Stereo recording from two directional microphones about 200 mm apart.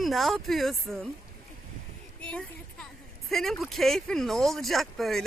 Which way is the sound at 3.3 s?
Centre (ahead or behind).